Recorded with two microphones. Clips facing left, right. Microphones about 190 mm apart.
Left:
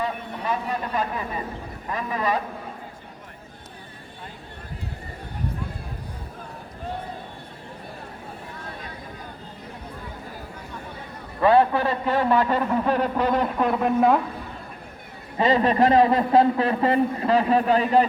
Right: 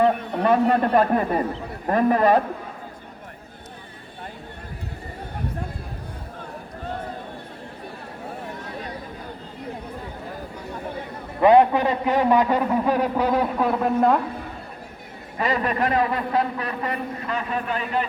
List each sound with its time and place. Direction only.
0.0 s a man's voice: 60° right (ahead or behind)
11.3 s a man's voice: 20° right (ahead or behind); by 14.2 s centre (ahead or behind)
15.4 s a man's voice: 25° left (ahead or behind)